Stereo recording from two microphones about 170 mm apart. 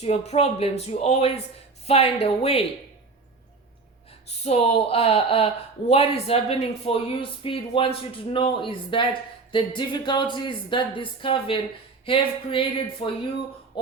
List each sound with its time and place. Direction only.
0.0 s speech: 40° left (ahead or behind)
4.3 s speech: 40° left (ahead or behind)